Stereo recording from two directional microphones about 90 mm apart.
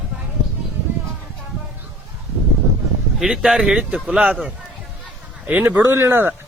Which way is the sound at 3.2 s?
5° right (ahead or behind).